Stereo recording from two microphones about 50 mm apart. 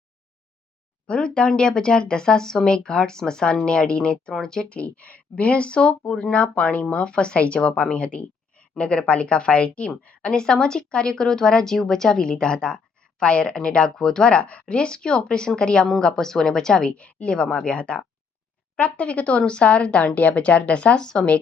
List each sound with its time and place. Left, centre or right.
1.0 s speech: centre
4.7 s speech: left
10.3 s speech: centre